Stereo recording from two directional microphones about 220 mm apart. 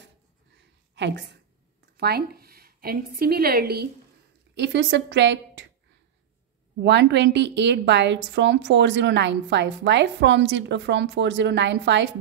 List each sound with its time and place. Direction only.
0.6 s a sound: 50° right (ahead or behind)
2.0 s a woman's voice: 45° right (ahead or behind)
6.8 s a woman's voice: 50° right (ahead or behind)